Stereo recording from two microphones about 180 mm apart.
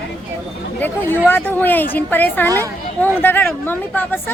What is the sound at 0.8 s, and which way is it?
A woman's voice, 10° left (ahead or behind).